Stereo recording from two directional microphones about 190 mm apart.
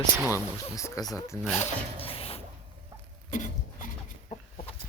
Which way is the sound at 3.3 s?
45° left (ahead or behind).